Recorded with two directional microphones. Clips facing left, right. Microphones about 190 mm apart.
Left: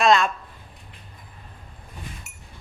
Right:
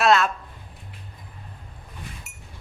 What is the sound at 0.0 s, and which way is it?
Speech, 5° right (ahead or behind).